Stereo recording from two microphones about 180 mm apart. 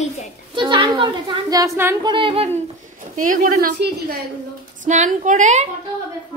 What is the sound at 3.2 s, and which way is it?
A woman's voice, 50° right (ahead or behind).